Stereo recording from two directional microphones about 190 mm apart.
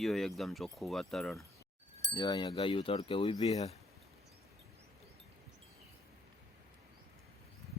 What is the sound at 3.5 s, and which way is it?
Speech, 35° left (ahead or behind).